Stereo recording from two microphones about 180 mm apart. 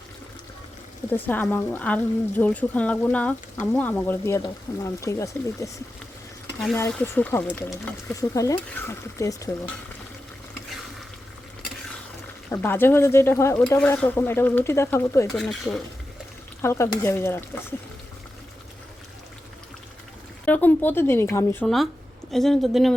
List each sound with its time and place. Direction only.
1.1 s speech: 10° left (ahead or behind)
6.7 s speech: 15° left (ahead or behind)
12.5 s speech: 10° left (ahead or behind)
15.4 s a woman's voice: centre (ahead or behind)
16.6 s speech: 15° left (ahead or behind)
20.4 s speech: 10° left (ahead or behind)
22.3 s a woman's voice: centre (ahead or behind)